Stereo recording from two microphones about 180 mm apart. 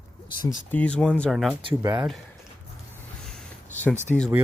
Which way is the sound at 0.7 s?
5° left (ahead or behind).